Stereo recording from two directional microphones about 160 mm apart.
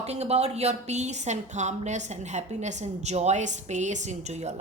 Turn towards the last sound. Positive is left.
turn(degrees=-45)  # may be behind; listen again after turning